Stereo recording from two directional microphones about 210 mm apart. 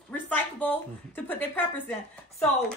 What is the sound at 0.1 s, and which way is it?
A woman's voice, 5° left (ahead or behind).